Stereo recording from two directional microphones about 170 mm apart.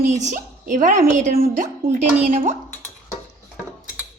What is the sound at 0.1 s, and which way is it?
A woman's voice, 45° right (ahead or behind).